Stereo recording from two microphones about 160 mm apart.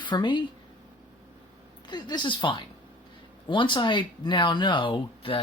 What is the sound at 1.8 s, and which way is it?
Speech, 30° left (ahead or behind).